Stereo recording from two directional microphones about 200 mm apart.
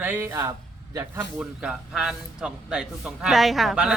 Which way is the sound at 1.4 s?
5° right (ahead or behind).